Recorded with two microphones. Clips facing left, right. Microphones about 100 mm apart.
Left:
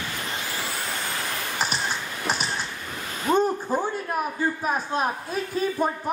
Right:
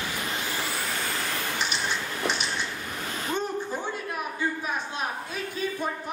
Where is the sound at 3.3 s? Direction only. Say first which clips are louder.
Left 9 dB; 45° left (ahead or behind).